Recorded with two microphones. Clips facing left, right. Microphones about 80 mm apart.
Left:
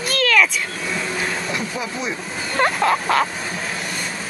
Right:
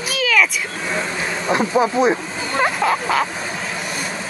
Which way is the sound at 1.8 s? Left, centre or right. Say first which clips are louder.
Right 11 dB; right.